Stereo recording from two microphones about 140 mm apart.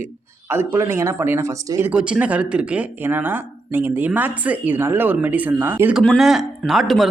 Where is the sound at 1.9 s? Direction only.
10° right (ahead or behind).